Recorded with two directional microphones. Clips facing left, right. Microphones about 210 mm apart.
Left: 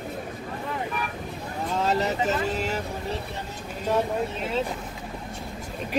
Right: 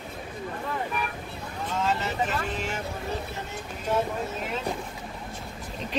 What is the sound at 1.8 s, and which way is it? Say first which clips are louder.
Speech: left 3 dB; 40° left (ahead or behind).